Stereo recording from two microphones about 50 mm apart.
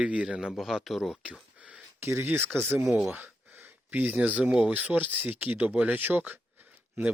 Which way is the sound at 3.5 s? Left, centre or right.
Right.